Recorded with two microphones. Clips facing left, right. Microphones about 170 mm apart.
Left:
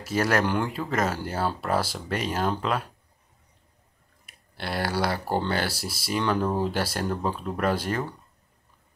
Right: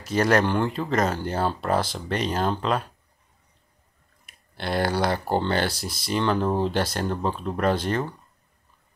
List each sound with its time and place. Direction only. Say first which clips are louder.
0.0 s speech: right 3 dB; 5° left (ahead or behind)
4.3 s speech: right 4 dB; 5° left (ahead or behind)
5.2 s speech: right 2 dB; 20° right (ahead or behind)
5.5 s speech: right 3 dB; 5° left (ahead or behind)
6.4 s speech: right 2 dB; 20° right (ahead or behind)
6.7 s speech: right 2 dB; 5° left (ahead or behind)